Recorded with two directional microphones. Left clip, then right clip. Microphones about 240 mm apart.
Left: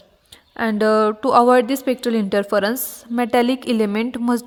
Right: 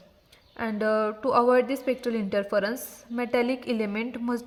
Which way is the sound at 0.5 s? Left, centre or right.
Left.